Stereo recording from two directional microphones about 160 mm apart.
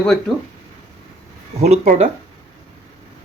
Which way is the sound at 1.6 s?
45° right (ahead or behind).